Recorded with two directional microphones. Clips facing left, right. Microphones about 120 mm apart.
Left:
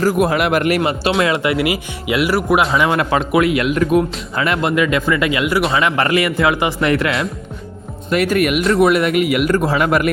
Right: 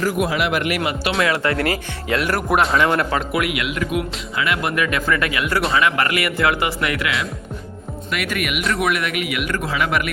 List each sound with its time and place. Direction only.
0.0 s speech: 45° left (ahead or behind)
0.8 s a man's voice: 30° left (ahead or behind)
1.4 s speech: 10° left (ahead or behind)
2.8 s a man's voice: 15° left (ahead or behind)
3.5 s speech: 40° left (ahead or behind)
4.6 s a man's voice: 25° left (ahead or behind); by 10.1 s 40° left (ahead or behind)